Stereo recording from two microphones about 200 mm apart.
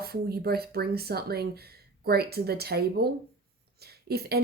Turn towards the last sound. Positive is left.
turn(degrees=-50)  # may be behind; listen again after turning